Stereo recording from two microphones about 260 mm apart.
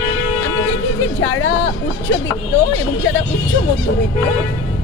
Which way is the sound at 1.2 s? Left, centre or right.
Left.